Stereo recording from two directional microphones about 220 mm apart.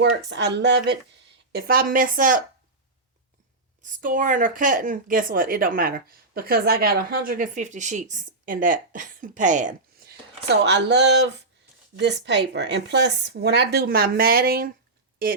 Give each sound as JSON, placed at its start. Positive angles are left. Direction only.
{"t": 0.0, "sound": "speech", "side_deg": -50}
{"t": 3.8, "sound": "speech", "side_deg": -35}